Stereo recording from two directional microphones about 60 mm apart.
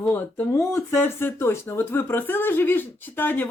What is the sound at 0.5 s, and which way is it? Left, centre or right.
Speech, left.